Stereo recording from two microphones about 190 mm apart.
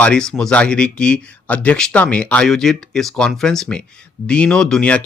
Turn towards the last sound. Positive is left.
turn(degrees=5)  # may be behind; listen again after turning